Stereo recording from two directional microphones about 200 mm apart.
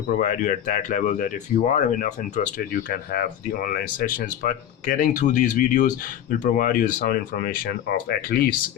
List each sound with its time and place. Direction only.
0.2 s speech: 40° left (ahead or behind)